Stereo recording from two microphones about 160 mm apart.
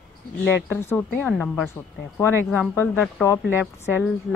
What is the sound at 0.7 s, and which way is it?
A woman's voice, 15° left (ahead or behind).